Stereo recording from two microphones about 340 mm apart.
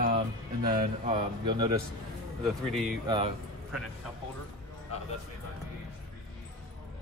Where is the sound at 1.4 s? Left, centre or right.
Centre.